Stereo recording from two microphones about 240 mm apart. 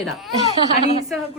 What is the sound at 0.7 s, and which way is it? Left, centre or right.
Speech, left.